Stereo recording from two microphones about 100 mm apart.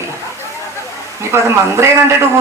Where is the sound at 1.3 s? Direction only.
25° right (ahead or behind).